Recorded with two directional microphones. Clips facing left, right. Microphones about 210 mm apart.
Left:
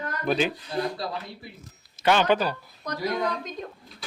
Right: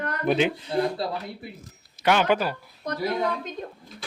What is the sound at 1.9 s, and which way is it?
Speech, 10° right (ahead or behind).